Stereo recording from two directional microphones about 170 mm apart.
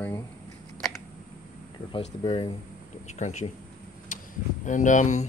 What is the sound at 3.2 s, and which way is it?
Speech, 45° left (ahead or behind).